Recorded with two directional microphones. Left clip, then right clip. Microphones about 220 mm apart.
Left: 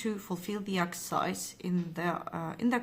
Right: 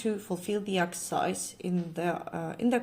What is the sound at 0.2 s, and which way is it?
A woman's voice, 50° left (ahead or behind).